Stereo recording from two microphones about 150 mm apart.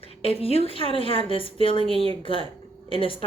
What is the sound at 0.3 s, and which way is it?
A woman's voice, 40° left (ahead or behind).